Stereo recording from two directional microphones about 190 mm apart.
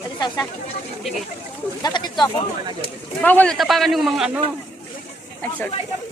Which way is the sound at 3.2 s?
10° left (ahead or behind).